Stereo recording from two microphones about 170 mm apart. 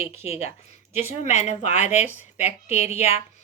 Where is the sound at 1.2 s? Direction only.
40° left (ahead or behind).